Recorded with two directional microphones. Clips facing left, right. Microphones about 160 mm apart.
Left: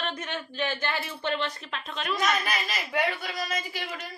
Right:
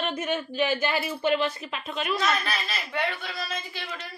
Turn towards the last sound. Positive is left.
turn(degrees=10)  # may be behind; listen again after turning